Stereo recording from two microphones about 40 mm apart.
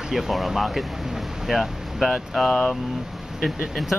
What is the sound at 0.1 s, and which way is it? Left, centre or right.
Speech, centre.